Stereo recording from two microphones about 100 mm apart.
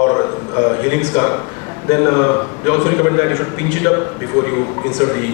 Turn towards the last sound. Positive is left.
turn(degrees=30)  # may be behind; listen again after turning